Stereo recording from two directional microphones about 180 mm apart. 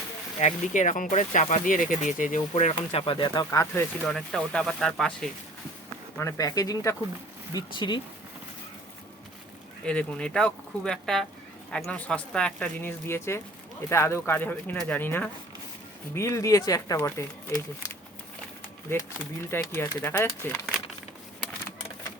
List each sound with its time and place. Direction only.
0.3 s speech: 40° left (ahead or behind)
3.0 s speech: 25° left (ahead or behind)
4.0 s speech: centre (ahead or behind)
6.1 s speech: 15° left (ahead or behind)
9.8 s speech: 5° left (ahead or behind)
19.5 s speech: 10° left (ahead or behind)